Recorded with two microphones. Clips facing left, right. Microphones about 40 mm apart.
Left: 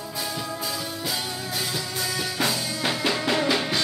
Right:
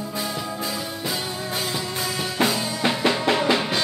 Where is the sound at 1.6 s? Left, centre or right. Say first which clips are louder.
Right 1 dB; centre.